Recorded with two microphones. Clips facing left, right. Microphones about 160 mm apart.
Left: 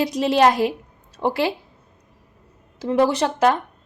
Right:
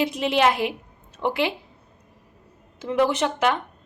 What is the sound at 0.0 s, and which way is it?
A woman's voice, 35° left (ahead or behind).